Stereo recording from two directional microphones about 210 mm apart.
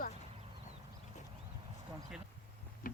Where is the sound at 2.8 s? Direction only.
40° left (ahead or behind).